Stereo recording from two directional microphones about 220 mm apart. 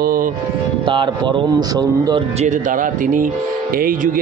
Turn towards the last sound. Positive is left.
turn(degrees=-40)  # may be behind; listen again after turning